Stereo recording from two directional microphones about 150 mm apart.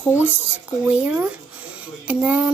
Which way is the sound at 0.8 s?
10° right (ahead or behind).